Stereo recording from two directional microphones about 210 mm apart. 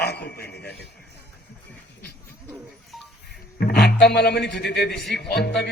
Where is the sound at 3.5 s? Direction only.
50° left (ahead or behind).